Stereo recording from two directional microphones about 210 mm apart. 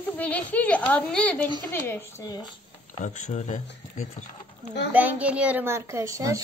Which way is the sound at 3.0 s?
35° left (ahead or behind).